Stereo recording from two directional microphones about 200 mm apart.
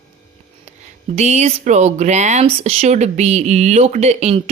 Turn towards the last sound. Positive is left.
turn(degrees=-35)  # may be behind; listen again after turning